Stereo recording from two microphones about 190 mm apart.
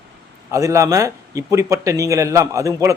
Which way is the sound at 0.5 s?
15° right (ahead or behind).